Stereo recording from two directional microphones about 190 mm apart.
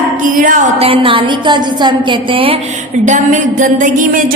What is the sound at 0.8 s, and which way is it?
A woman's voice, 30° right (ahead or behind).